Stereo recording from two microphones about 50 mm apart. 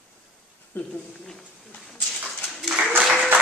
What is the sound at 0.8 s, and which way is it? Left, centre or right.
Speech, left.